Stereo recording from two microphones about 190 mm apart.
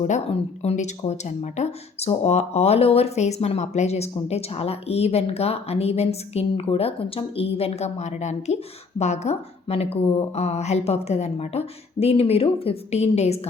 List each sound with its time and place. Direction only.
0.0 s a woman's voice: 35° left (ahead or behind)